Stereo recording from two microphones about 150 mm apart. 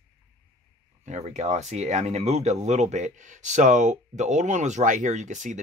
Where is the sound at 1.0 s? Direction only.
50° right (ahead or behind).